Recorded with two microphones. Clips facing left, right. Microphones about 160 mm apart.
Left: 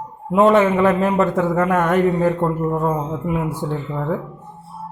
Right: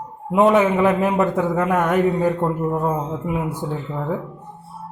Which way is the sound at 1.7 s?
Centre (ahead or behind).